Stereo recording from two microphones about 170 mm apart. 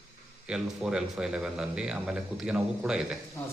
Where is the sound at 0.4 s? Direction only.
5° right (ahead or behind).